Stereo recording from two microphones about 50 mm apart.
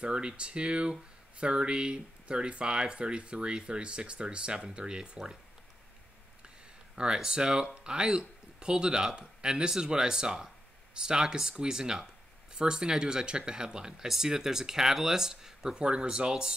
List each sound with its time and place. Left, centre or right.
0.0 s speech: centre
7.0 s speech: centre